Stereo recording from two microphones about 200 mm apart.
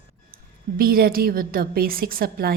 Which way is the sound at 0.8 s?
50° right (ahead or behind).